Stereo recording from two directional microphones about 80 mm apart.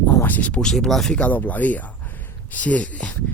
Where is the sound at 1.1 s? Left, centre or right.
Centre.